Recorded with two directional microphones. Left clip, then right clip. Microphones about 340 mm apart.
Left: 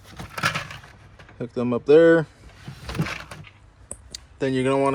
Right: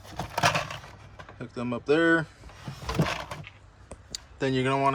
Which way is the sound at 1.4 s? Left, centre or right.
Centre.